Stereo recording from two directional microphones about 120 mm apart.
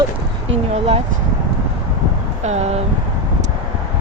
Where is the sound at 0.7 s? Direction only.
55° right (ahead or behind).